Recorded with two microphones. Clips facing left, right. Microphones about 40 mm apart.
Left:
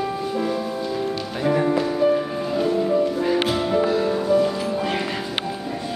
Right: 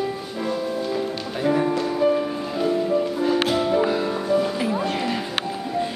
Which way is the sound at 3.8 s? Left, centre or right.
Centre.